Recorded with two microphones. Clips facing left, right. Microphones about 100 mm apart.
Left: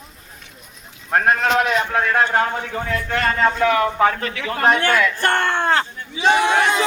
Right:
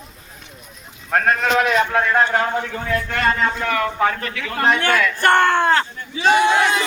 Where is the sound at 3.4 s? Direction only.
15° left (ahead or behind).